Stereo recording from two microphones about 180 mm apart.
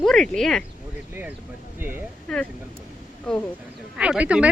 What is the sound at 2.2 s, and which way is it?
Speech, 5° left (ahead or behind).